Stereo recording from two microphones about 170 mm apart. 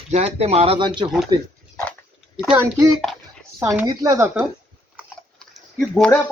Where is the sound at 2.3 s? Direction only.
5° right (ahead or behind).